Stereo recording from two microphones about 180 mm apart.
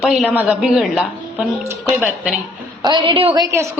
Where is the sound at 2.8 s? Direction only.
25° right (ahead or behind).